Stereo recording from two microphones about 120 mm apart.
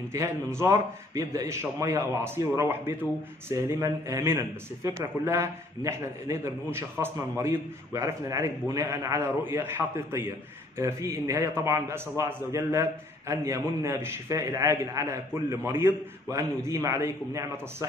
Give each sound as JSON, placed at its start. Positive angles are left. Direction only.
{"t": 0.1, "sound": "a man's voice", "side_deg": -25}